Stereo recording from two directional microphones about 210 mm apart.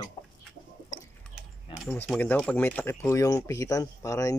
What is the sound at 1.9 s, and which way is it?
Speech, 10° left (ahead or behind).